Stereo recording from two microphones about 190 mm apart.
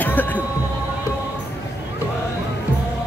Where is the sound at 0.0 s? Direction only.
10° left (ahead or behind).